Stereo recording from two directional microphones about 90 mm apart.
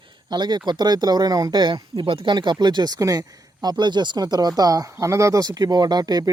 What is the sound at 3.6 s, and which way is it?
Speech, 55° right (ahead or behind).